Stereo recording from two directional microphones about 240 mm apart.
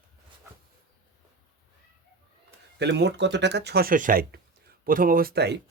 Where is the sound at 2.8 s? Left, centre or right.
Right.